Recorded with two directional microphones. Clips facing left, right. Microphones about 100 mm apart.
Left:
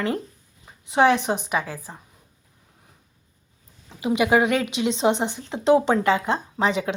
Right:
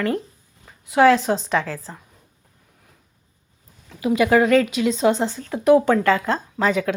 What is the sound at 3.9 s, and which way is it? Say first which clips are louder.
A woman's voice: right 2 dB; 20° left (ahead or behind).